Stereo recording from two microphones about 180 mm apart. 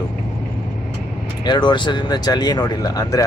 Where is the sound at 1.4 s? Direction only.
25° left (ahead or behind).